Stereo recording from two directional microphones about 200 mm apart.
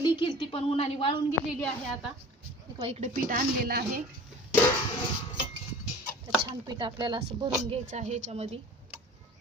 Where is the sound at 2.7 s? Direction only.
30° right (ahead or behind); by 4.0 s 50° right (ahead or behind).